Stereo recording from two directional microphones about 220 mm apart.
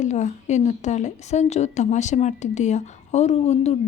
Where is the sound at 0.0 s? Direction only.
30° left (ahead or behind).